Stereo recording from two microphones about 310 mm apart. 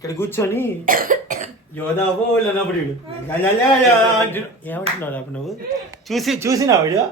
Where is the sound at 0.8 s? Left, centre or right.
Right.